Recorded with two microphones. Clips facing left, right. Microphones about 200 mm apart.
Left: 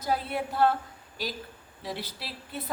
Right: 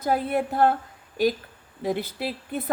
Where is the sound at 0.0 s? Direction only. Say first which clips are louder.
Right 6 dB; 50° right (ahead or behind).